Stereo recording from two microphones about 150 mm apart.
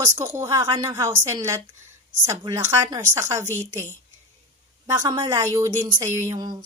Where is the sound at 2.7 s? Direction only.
25° right (ahead or behind).